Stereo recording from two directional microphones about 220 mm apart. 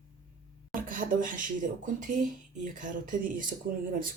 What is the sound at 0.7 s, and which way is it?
Speech, 40° right (ahead or behind).